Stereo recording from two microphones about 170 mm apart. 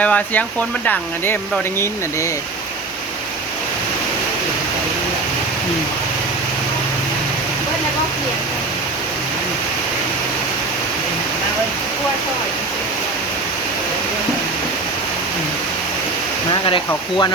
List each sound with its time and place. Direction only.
0.0 s speech: 10° left (ahead or behind)
16.5 s speech: 30° left (ahead or behind)